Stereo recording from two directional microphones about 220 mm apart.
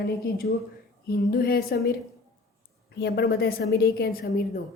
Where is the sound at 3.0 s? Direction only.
45° left (ahead or behind).